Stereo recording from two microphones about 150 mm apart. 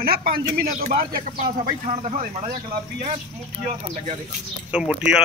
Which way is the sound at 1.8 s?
50° right (ahead or behind).